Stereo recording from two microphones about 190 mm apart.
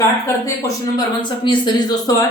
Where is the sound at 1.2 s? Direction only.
25° left (ahead or behind).